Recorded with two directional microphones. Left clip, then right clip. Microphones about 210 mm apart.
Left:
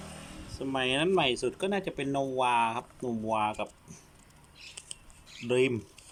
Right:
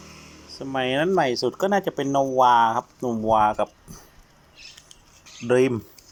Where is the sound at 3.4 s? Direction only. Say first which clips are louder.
Right 11 dB; 40° right (ahead or behind).